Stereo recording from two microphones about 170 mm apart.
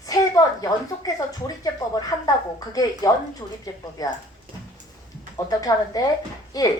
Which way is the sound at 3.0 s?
20° left (ahead or behind).